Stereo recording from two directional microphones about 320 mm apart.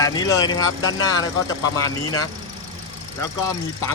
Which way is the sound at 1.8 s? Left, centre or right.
Left.